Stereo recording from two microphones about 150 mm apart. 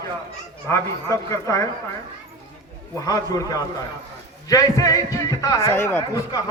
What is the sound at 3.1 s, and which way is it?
A man's voice, 25° left (ahead or behind).